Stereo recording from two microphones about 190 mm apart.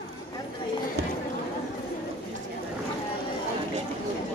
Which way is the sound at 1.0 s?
60° right (ahead or behind).